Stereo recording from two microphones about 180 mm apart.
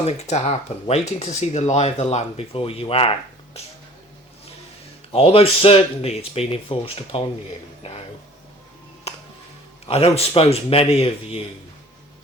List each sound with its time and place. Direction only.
0.0 s speech: 35° left (ahead or behind)
5.1 s speech: 30° left (ahead or behind)
9.1 s music: 35° left (ahead or behind)
9.8 s speech: 35° left (ahead or behind)